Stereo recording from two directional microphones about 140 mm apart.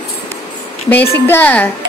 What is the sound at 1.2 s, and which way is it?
Speech, 15° left (ahead or behind).